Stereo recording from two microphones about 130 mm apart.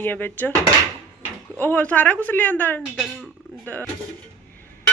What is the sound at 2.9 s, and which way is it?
Speech, centre (ahead or behind).